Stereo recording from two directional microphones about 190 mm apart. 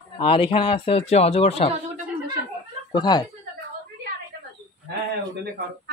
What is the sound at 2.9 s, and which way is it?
Speech, 20° left (ahead or behind).